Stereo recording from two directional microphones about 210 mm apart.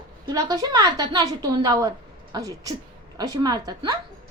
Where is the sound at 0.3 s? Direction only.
15° right (ahead or behind).